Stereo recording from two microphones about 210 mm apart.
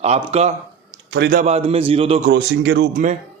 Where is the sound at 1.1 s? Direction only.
50° right (ahead or behind).